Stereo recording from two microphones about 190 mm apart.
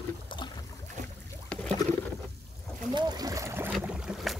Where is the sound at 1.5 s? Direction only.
10° left (ahead or behind).